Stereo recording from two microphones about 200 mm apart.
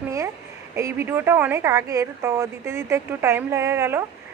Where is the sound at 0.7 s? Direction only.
15° right (ahead or behind).